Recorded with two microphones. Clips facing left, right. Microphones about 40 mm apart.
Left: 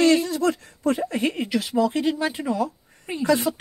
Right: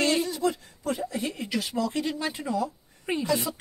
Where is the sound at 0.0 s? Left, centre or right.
Left.